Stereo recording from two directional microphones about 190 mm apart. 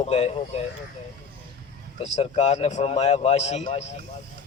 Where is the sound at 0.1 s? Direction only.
30° left (ahead or behind).